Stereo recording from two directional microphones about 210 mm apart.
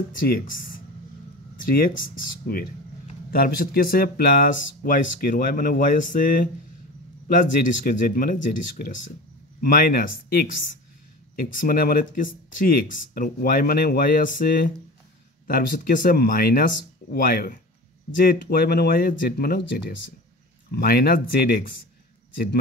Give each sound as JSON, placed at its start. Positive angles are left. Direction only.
{"t": 0.2, "sound": "speech", "side_deg": 40}